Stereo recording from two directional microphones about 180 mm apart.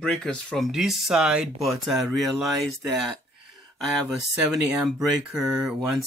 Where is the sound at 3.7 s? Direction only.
Centre (ahead or behind).